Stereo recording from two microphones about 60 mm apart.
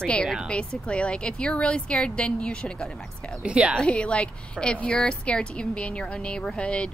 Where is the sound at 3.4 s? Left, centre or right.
Centre.